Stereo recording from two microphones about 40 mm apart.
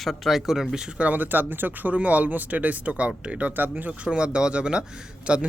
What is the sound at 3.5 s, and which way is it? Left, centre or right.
Speech, right.